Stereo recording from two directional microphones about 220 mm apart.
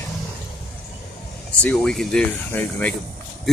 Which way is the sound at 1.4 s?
5° left (ahead or behind).